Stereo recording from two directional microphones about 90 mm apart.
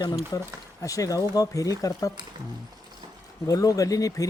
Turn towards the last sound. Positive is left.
turn(degrees=40)  # may be behind; listen again after turning